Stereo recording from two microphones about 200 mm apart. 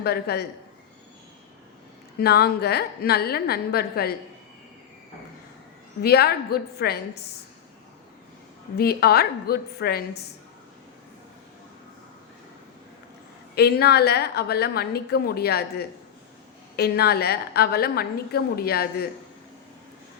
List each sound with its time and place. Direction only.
0.0 s a woman's voice: 55° left (ahead or behind)
2.1 s a woman's voice: 50° left (ahead or behind)
6.0 s a woman's voice: 50° left (ahead or behind)
8.8 s a woman's voice: 50° left (ahead or behind)
13.6 s a woman's voice: 50° left (ahead or behind)
16.7 s a woman's voice: 55° left (ahead or behind)